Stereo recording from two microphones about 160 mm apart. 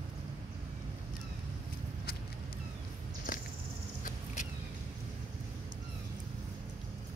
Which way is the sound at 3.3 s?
60° left (ahead or behind).